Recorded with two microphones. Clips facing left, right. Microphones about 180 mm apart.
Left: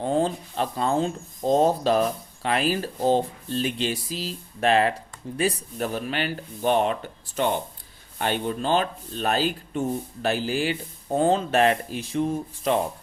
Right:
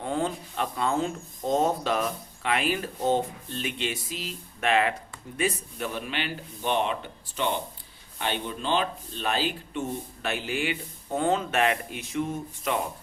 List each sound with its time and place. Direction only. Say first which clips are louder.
0.0 s speech: left 5 dB; 30° left (ahead or behind)